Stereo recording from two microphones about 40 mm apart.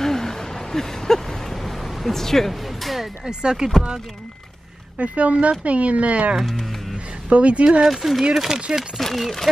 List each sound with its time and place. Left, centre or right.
0.0 s a sound: centre
3.3 s speech: centre
4.9 s speech: right
7.6 s speech: right
7.9 s speech: centre
8.4 s speech: centre
9.0 s speech: centre